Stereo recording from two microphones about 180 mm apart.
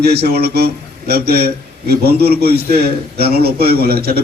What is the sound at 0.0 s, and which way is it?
A man's voice, 60° right (ahead or behind).